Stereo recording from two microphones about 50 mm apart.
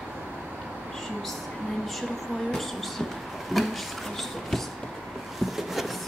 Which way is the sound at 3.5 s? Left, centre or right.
Centre.